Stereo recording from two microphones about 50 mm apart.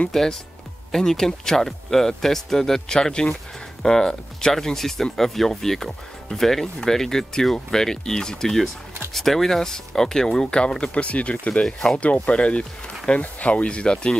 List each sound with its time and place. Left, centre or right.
0.1 s speech: centre; by 11.6 s left
11.6 s speech: centre
12.3 s speech: left